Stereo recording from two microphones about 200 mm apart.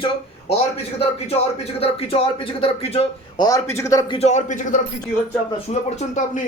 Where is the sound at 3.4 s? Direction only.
15° left (ahead or behind).